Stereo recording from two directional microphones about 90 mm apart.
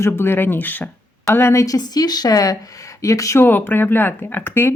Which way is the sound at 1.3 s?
30° left (ahead or behind).